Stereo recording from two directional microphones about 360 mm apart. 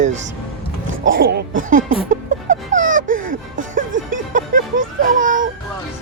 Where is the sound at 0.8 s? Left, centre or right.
Right.